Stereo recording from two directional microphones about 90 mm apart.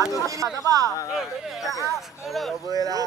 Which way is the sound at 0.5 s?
40° right (ahead or behind).